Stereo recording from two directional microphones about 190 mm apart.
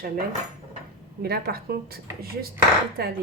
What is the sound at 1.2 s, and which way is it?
Speech, 55° right (ahead or behind).